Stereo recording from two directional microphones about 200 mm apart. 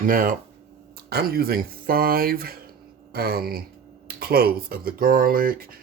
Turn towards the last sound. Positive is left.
turn(degrees=-45)  # may be behind; listen again after turning